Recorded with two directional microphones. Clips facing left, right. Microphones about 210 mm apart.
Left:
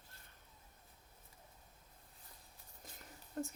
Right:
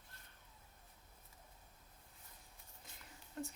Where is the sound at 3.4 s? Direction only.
40° left (ahead or behind).